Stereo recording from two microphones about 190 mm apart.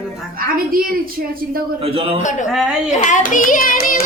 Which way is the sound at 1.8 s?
30° right (ahead or behind).